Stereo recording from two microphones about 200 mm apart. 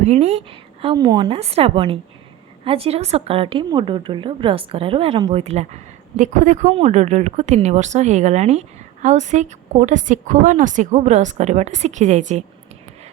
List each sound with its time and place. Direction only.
0.0 s a woman's voice: 30° right (ahead or behind)